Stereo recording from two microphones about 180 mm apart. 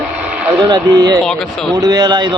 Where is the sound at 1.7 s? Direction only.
20° right (ahead or behind).